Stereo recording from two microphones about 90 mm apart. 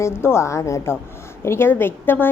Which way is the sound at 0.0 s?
30° left (ahead or behind).